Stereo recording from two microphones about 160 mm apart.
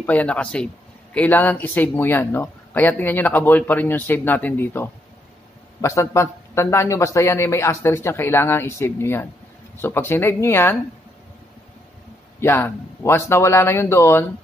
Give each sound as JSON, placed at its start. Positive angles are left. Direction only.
{"t": 0.0, "sound": "speech", "side_deg": 10}
{"t": 12.4, "sound": "speech", "side_deg": 15}